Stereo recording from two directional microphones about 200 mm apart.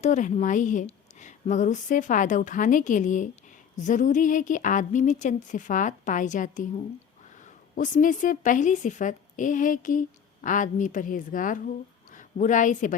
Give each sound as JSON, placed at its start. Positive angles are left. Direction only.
{"t": 0.0, "sound": "a woman's voice", "side_deg": 35}